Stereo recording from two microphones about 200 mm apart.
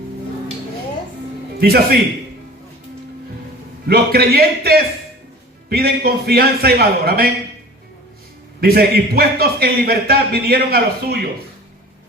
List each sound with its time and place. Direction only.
1.5 s a man's voice: 50° right (ahead or behind)
3.8 s a man's voice: 50° right (ahead or behind)
8.6 s a man's voice: 50° right (ahead or behind)